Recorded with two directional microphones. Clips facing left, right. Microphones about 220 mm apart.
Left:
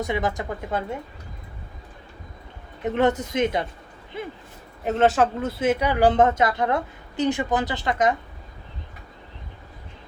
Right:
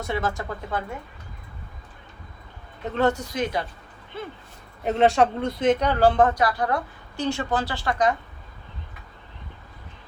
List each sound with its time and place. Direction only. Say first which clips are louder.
0.0 s speech: left 2 dB; 15° left (ahead or behind)
2.8 s speech: left 2 dB; 20° left (ahead or behind)
4.8 s speech: even; centre (ahead or behind); by 8.1 s 20° left (ahead or behind)